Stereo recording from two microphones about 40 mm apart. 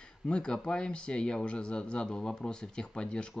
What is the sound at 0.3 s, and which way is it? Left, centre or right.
Speech, left.